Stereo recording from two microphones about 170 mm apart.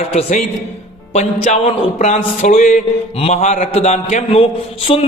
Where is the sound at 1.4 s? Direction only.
45° left (ahead or behind).